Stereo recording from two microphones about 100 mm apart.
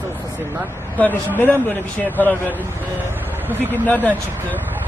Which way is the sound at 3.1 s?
20° right (ahead or behind).